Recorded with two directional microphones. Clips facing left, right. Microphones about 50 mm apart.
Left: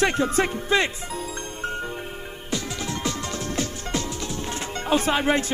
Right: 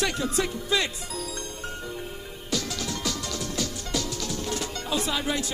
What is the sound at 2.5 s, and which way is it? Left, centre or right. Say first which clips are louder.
Music: left 1 dB; left.